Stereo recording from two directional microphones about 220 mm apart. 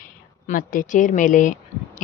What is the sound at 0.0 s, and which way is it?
A woman's voice, 40° left (ahead or behind).